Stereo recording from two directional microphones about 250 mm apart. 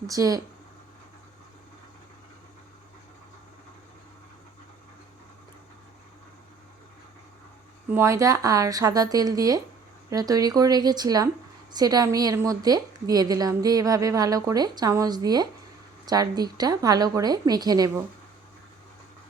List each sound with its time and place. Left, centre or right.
0.1 s a woman's voice: centre
7.9 s a woman's voice: centre